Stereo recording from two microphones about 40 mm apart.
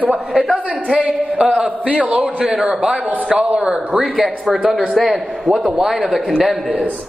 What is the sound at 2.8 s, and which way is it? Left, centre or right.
Speech, right.